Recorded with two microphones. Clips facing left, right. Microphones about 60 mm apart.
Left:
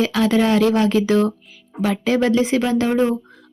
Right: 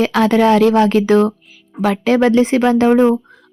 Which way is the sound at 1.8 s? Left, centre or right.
Right.